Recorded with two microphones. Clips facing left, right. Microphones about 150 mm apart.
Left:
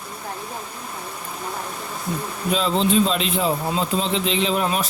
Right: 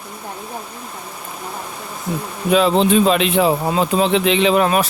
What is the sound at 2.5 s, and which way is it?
Speech, 70° right (ahead or behind).